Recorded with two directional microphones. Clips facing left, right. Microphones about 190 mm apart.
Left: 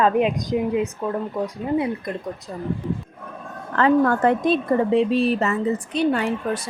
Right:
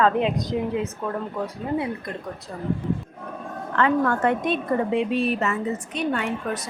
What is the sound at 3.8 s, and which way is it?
A woman's voice, 35° left (ahead or behind).